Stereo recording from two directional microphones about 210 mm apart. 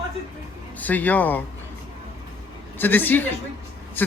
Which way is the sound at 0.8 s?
10° left (ahead or behind).